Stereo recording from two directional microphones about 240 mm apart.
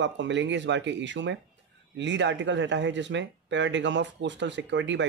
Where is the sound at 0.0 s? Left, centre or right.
Right.